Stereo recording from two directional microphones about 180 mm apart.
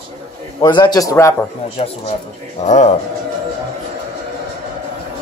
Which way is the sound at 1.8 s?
35° left (ahead or behind).